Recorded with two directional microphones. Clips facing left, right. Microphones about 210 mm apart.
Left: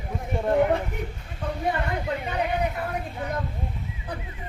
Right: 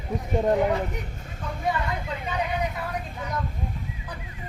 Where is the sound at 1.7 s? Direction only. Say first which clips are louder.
Even; 55° left (ahead or behind).